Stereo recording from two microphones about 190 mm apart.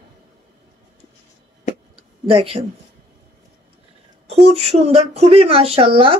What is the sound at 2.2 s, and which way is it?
Speech, 30° right (ahead or behind).